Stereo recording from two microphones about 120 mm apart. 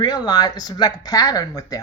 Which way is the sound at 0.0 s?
35° left (ahead or behind).